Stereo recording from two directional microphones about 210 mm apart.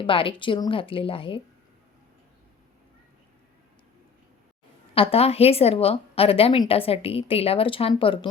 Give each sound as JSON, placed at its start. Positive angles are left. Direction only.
{"t": 0.0, "sound": "speech", "side_deg": 25}
{"t": 4.9, "sound": "speech", "side_deg": 30}